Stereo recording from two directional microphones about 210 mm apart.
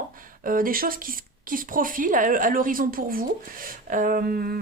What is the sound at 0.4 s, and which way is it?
Speech, 40° right (ahead or behind).